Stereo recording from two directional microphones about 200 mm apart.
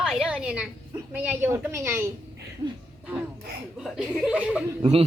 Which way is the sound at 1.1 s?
10° right (ahead or behind).